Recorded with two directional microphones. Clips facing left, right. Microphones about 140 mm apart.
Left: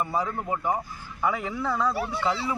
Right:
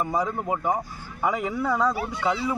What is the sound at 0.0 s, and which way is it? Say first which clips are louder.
Speech: right 2 dB; 15° right (ahead or behind).